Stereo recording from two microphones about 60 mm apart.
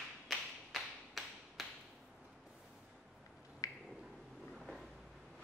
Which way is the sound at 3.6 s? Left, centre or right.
Left.